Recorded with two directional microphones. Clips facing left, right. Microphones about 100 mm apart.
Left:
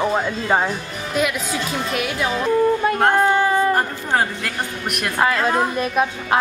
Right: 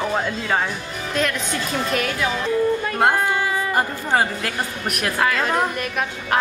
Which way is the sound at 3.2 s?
30° left (ahead or behind).